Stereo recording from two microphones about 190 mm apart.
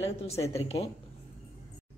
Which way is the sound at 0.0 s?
30° left (ahead or behind).